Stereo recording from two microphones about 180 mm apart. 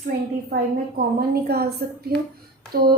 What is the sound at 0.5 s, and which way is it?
A woman's voice, 60° right (ahead or behind).